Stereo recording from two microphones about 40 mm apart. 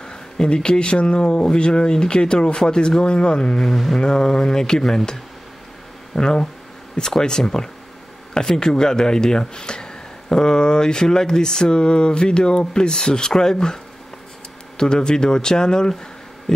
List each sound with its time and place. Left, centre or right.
0.0 s speech: centre
3.5 s speech: centre
14.8 s speech: centre
16.5 s a sound: centre